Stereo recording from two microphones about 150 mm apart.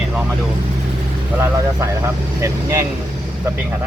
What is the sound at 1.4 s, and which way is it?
Speech, 20° right (ahead or behind).